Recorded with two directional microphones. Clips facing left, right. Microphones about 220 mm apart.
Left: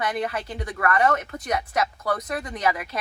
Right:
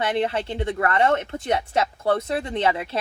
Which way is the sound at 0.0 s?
25° right (ahead or behind).